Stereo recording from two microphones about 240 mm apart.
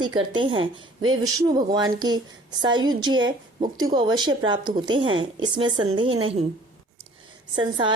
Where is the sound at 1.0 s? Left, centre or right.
Right.